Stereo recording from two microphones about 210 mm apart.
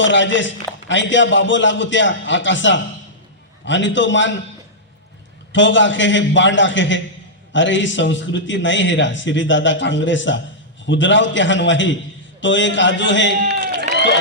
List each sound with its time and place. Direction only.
0.0 s a man's voice: 60° left (ahead or behind)
5.5 s a man's voice: 60° left (ahead or behind)
13.5 s run: 50° right (ahead or behind)